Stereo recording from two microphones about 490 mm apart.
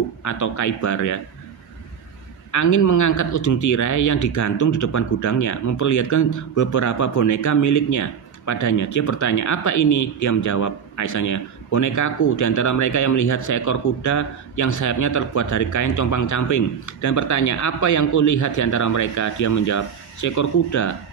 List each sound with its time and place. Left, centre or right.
0.2 s speech: left
2.5 s speech: left